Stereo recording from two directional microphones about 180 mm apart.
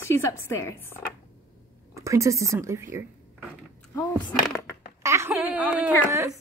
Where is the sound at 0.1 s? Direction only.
15° left (ahead or behind).